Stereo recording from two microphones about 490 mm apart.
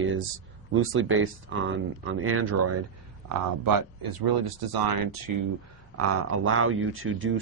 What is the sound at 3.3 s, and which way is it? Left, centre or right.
Speech, right.